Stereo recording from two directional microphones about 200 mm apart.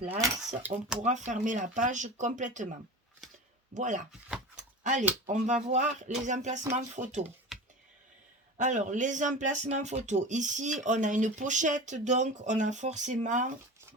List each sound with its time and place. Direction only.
0.2 s speech: 10° right (ahead or behind)
0.9 s speech: 35° right (ahead or behind)
3.8 s speech: 40° right (ahead or behind)
4.5 s a sound: 40° right (ahead or behind)
5.2 s speech: 35° right (ahead or behind)
8.5 s speech: 40° right (ahead or behind)